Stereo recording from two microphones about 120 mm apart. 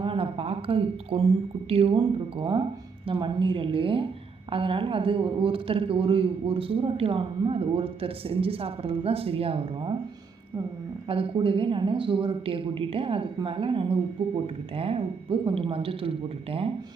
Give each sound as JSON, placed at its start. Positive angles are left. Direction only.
{"t": 0.0, "sound": "a woman's voice", "side_deg": -50}
{"t": 11.1, "sound": "speech", "side_deg": -50}